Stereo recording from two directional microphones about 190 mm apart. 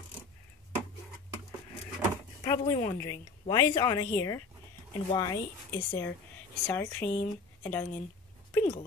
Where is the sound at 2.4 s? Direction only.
15° left (ahead or behind).